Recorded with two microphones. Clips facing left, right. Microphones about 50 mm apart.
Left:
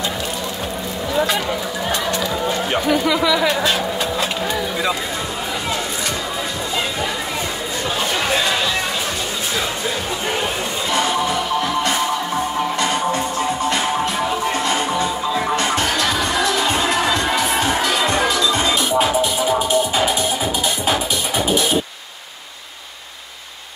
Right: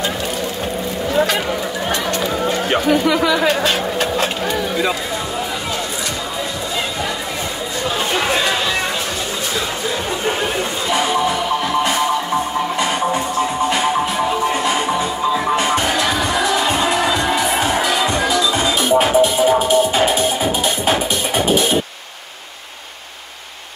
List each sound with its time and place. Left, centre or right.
3.6 s vehicle: right
10.9 s music: centre
18.8 s music: right